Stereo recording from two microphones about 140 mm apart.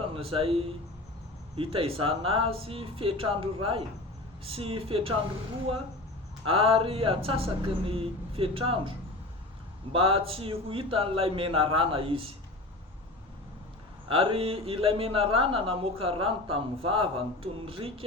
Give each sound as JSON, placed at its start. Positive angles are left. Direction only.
{"t": 0.1, "sound": "speech", "side_deg": -40}
{"t": 6.4, "sound": "speech", "side_deg": -40}
{"t": 9.9, "sound": "speech", "side_deg": -40}
{"t": 14.1, "sound": "speech", "side_deg": -40}